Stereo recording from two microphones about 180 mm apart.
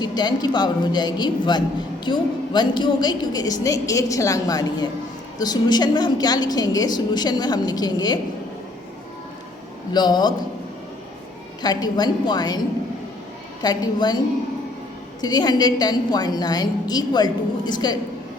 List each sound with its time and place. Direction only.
0.0 s a woman's voice: 25° left (ahead or behind)
9.9 s a woman's voice: 25° left (ahead or behind)
11.6 s a woman's voice: 20° left (ahead or behind)
13.6 s a woman's voice: 20° left (ahead or behind)
15.2 s a woman's voice: 20° left (ahead or behind)